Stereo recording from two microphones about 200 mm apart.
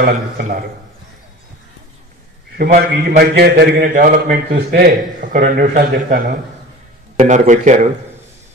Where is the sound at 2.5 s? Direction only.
50° right (ahead or behind).